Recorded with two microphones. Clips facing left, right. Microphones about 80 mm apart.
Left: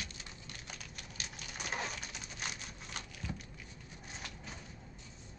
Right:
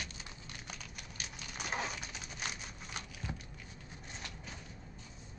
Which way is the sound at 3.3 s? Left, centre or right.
Right.